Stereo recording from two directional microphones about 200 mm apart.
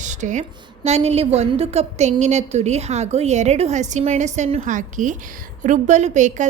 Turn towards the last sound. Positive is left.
turn(degrees=-35)  # may be behind; listen again after turning